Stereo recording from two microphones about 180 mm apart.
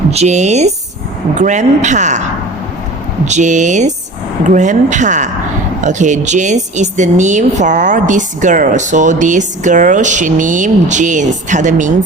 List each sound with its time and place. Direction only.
0.1 s a woman's voice: 40° right (ahead or behind)
3.2 s a woman's voice: 40° right (ahead or behind)